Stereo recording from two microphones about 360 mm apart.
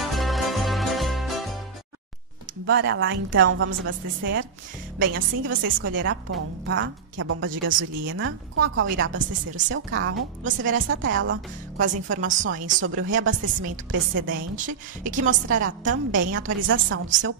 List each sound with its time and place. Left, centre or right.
0.0 s music: centre
2.6 s a woman's voice: right
15.0 s a woman's voice: right
15.6 s a woman's voice: right